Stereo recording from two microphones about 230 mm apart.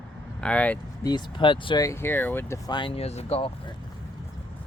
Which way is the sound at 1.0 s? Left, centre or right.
Centre.